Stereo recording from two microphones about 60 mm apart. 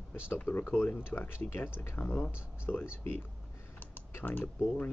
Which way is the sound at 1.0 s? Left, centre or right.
Left.